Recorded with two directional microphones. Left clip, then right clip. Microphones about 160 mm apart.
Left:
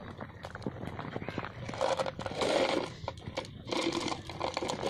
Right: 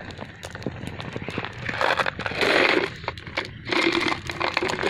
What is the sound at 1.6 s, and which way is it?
Crushing, 70° left (ahead or behind).